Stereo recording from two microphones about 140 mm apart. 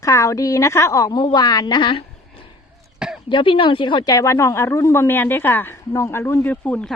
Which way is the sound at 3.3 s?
40° left (ahead or behind).